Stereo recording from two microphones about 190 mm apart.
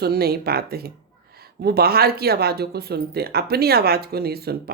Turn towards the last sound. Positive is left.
turn(degrees=-55)  # may be behind; listen again after turning